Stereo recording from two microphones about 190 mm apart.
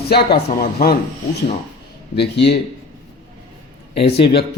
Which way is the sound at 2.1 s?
60° left (ahead or behind).